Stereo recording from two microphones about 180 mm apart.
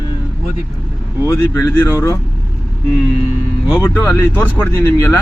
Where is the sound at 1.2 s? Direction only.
15° left (ahead or behind).